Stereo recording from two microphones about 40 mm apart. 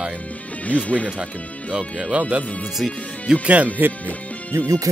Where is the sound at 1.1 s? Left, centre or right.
Right.